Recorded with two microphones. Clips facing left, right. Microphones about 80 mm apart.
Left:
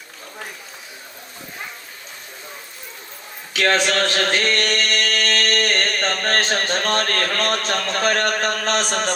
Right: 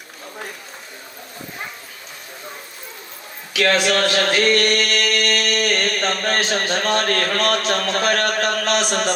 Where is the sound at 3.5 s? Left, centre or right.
Left.